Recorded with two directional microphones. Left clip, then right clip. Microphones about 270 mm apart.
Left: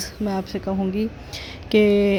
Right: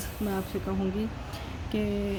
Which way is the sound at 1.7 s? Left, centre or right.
Left.